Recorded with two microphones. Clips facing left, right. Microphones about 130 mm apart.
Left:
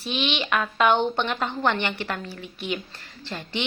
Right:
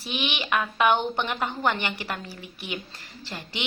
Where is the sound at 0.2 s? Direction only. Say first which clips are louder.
Left 1 dB; 10° right (ahead or behind).